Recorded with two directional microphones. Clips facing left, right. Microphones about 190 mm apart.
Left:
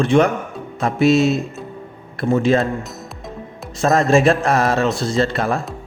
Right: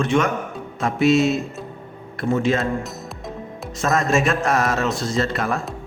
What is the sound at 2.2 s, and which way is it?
Speech, 35° left (ahead or behind).